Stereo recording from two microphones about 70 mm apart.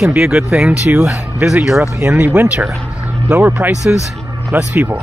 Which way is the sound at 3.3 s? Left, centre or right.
Right.